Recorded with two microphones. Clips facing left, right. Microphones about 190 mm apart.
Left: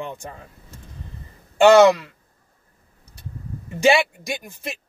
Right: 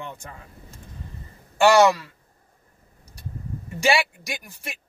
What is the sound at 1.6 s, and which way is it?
Speech, 20° left (ahead or behind).